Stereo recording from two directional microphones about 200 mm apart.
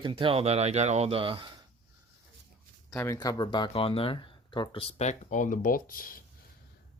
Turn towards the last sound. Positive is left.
turn(degrees=45)  # may be behind; listen again after turning